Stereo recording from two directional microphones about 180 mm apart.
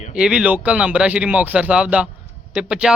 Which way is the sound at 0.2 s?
5° right (ahead or behind).